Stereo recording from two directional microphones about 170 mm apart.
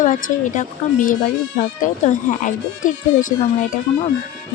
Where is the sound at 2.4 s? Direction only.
50° left (ahead or behind).